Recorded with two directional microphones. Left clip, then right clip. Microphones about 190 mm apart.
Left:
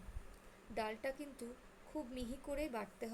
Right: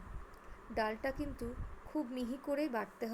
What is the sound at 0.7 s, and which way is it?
A woman's voice, 15° right (ahead or behind).